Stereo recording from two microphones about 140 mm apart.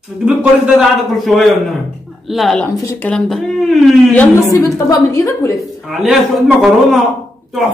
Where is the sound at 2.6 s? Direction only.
15° left (ahead or behind).